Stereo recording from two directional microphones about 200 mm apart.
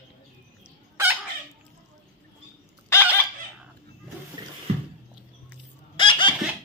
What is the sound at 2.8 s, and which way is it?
Fowl, 15° left (ahead or behind).